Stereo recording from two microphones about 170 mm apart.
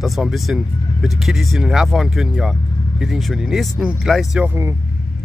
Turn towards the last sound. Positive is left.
turn(degrees=-15)  # may be behind; listen again after turning